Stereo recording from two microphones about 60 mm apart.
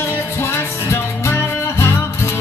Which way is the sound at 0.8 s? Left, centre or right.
Left.